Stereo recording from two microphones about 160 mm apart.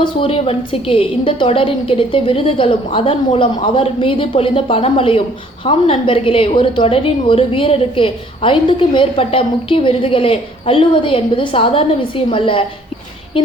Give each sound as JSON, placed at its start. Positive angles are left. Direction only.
{"t": 0.0, "sound": "a woman's voice", "side_deg": 35}